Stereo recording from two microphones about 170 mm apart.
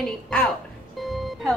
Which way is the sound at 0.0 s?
5° left (ahead or behind).